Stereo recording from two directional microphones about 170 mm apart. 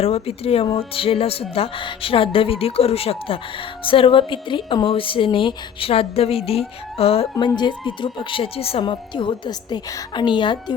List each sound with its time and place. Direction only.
0.0 s music: 35° left (ahead or behind)
3.8 s speech: 30° left (ahead or behind)